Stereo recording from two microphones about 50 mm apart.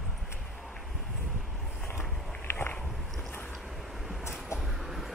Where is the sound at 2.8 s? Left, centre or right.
Centre.